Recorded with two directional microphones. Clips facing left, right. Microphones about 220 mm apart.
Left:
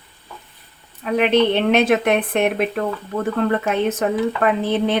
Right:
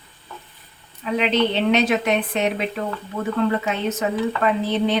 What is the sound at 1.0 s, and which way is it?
Speech, 55° left (ahead or behind).